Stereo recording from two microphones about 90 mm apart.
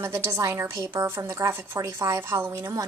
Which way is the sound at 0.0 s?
30° right (ahead or behind).